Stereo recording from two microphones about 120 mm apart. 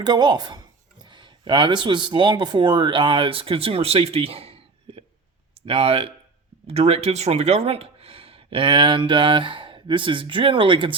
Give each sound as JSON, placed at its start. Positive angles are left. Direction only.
{"t": 0.0, "sound": "speech", "side_deg": -40}